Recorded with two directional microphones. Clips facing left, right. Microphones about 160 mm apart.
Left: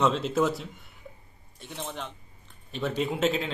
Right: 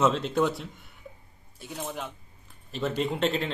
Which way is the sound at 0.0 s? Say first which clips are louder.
Even; centre (ahead or behind).